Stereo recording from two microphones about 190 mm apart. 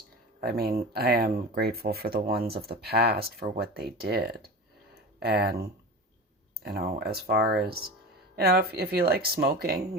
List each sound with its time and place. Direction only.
0.3 s speech: 50° right (ahead or behind)